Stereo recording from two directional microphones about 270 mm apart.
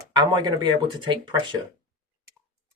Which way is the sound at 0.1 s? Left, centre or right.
Centre.